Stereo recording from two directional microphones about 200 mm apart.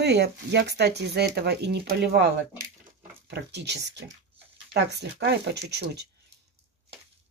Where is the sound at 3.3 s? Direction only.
55° right (ahead or behind).